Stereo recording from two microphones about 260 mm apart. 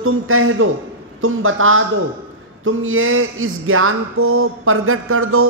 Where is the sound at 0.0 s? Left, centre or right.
Right.